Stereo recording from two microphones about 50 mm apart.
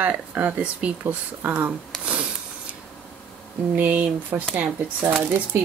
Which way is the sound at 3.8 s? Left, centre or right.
Right.